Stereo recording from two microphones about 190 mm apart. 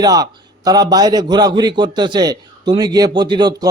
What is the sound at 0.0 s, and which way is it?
A man's voice, 20° right (ahead or behind).